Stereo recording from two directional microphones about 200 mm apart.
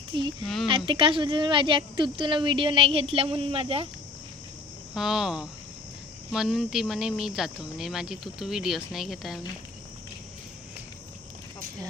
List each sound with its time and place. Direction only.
0.1 s speech: 25° right (ahead or behind)
0.4 s speech: centre (ahead or behind)
0.9 s speech: 25° right (ahead or behind)
4.9 s speech: centre (ahead or behind)